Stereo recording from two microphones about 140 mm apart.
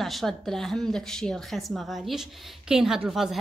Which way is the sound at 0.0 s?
Centre (ahead or behind).